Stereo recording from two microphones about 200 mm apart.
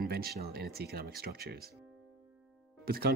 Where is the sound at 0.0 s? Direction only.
50° right (ahead or behind).